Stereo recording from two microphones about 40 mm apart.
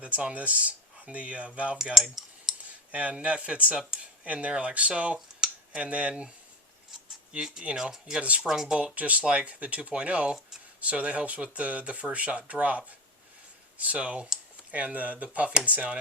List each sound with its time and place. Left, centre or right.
0.0 s speech: right
1.8 s speech: centre
2.9 s speech: right
7.8 s speech: centre
8.8 s speech: right